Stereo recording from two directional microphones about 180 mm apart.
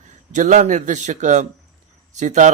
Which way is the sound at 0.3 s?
45° right (ahead or behind).